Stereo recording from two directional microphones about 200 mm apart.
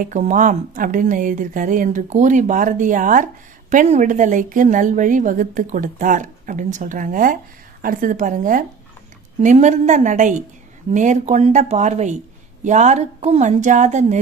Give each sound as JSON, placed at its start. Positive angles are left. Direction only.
{"t": 0.0, "sound": "a woman's voice", "side_deg": -40}